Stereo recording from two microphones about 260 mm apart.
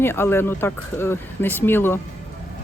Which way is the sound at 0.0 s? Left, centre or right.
Centre.